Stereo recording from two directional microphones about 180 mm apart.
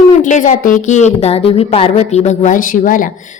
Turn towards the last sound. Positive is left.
turn(degrees=50)  # may be behind; listen again after turning